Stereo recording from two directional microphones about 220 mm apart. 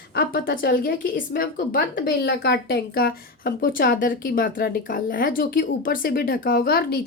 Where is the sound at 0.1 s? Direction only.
40° left (ahead or behind).